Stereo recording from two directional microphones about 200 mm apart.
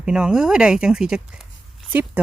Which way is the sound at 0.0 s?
5° right (ahead or behind).